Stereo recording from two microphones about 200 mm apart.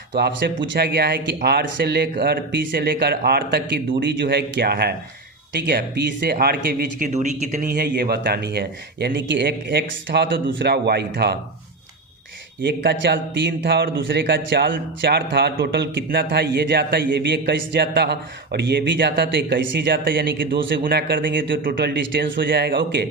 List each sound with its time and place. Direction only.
0.1 s speech: 60° right (ahead or behind)
7.1 s a man's voice: 35° right (ahead or behind); by 11.3 s 55° right (ahead or behind)
12.6 s a man's voice: 60° right (ahead or behind)
21.6 s a man's voice: 50° right (ahead or behind)